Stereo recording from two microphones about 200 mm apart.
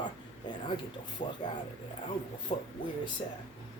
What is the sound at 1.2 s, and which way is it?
Speech, 40° left (ahead or behind).